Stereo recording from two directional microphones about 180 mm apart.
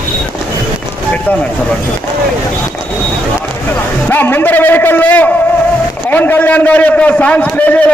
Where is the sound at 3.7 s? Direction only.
10° left (ahead or behind).